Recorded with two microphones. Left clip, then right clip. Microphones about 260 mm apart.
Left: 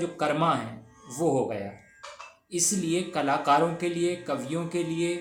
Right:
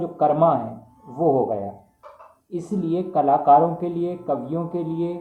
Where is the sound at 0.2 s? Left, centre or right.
Left.